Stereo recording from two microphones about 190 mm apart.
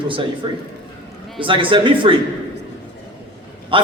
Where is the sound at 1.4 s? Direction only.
25° right (ahead or behind).